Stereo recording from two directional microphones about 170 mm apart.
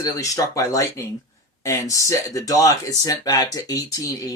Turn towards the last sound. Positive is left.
turn(degrees=20)  # may be behind; listen again after turning